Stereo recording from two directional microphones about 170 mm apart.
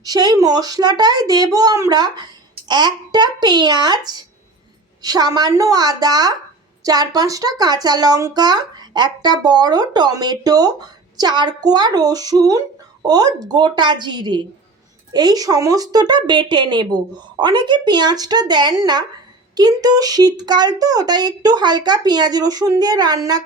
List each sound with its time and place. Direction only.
0.0 s speech: 20° right (ahead or behind)